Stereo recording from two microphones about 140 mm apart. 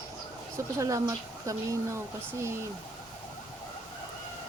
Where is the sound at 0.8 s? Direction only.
25° right (ahead or behind).